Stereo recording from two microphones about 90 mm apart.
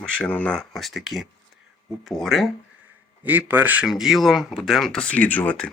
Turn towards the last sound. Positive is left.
turn(degrees=15)  # may be behind; listen again after turning